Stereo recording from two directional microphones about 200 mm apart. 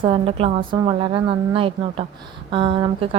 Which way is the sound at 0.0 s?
25° right (ahead or behind).